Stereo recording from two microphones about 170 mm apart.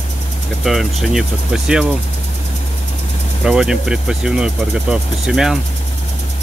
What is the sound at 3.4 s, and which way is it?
Speech, 5° right (ahead or behind).